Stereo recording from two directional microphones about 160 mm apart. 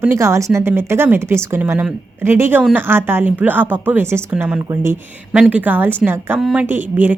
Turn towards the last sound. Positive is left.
turn(degrees=-10)  # may be behind; listen again after turning